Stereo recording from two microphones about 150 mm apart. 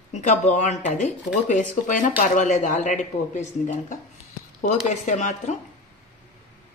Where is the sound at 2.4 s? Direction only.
55° left (ahead or behind).